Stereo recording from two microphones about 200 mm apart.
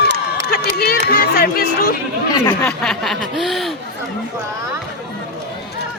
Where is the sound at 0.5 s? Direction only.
50° left (ahead or behind).